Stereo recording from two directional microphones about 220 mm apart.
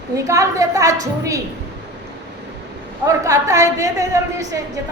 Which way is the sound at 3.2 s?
15° right (ahead or behind).